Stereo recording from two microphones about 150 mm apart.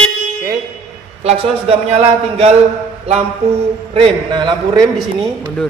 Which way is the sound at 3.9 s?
35° right (ahead or behind).